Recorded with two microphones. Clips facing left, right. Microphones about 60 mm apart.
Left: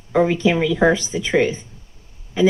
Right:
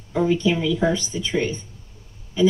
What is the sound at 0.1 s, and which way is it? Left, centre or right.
Speech, left.